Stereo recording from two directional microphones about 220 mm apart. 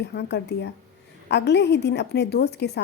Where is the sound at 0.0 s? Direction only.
50° left (ahead or behind).